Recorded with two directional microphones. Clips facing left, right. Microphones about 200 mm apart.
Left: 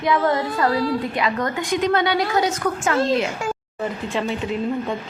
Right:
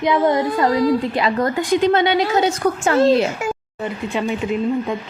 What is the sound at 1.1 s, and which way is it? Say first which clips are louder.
A woman's voice: right 4 dB; 35° right (ahead or behind).